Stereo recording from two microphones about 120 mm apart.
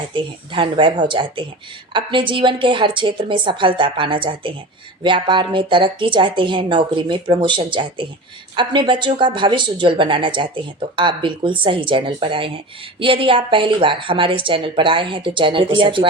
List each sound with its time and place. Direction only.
0.1 s a woman's voice: 45° right (ahead or behind)